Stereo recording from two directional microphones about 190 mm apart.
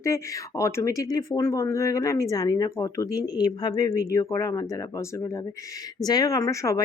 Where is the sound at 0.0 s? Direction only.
15° left (ahead or behind).